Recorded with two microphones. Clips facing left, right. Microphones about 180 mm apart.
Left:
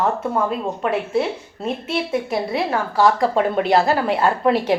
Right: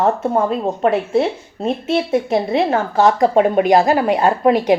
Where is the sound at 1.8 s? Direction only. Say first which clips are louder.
Right 6 dB; 25° right (ahead or behind).